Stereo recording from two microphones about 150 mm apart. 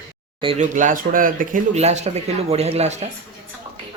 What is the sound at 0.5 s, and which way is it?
Speech, 60° right (ahead or behind).